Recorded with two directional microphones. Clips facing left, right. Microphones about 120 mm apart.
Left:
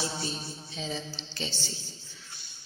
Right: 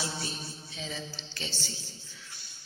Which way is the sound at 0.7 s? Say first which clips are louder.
Left 4 dB; 30° left (ahead or behind).